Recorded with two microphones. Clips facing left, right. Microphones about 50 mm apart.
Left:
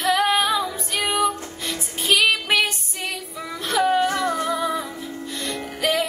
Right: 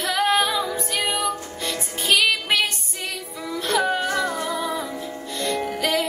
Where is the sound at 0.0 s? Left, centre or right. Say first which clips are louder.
Left 1 dB; centre.